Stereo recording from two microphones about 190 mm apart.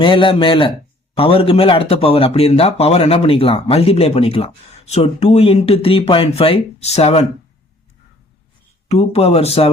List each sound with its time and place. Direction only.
0.0 s speech: 25° left (ahead or behind)
8.9 s speech: 35° left (ahead or behind)